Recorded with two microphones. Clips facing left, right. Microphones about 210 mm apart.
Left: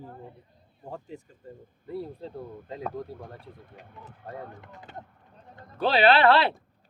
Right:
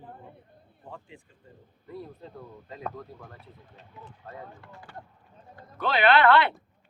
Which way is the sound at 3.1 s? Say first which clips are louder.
Left 5 dB; 50° left (ahead or behind).